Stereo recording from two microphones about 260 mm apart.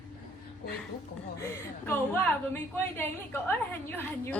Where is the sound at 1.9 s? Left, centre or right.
Centre.